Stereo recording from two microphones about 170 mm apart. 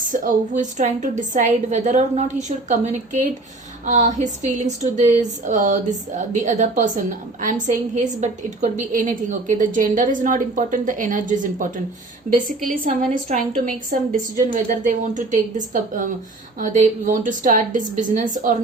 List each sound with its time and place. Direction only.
0.0 s a woman's voice: 50° right (ahead or behind)